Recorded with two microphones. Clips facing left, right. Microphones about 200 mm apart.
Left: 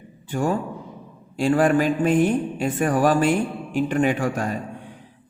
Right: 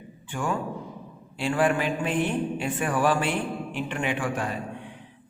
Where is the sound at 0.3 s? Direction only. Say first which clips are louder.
Left 5 dB; 40° left (ahead or behind).